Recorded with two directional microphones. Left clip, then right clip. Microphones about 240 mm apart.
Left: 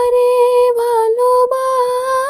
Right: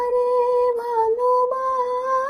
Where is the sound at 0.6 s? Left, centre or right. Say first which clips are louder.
Left 7 dB; left.